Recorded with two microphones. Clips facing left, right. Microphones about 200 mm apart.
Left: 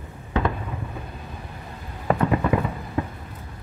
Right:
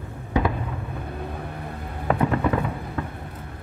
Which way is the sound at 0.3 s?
15° right (ahead or behind).